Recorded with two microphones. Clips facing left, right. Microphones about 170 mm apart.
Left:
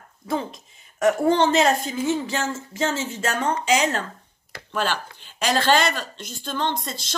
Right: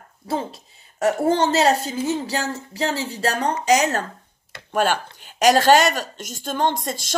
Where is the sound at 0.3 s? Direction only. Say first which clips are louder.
Right 1 dB; 35° right (ahead or behind).